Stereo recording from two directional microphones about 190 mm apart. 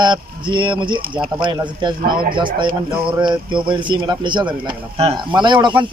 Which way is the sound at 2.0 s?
50° right (ahead or behind).